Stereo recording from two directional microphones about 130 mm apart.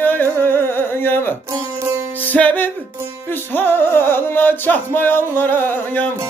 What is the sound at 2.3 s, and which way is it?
Music, 10° left (ahead or behind).